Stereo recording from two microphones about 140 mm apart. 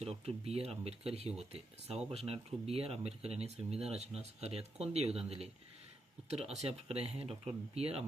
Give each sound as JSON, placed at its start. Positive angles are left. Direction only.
{"t": 0.0, "sound": "speech", "side_deg": -45}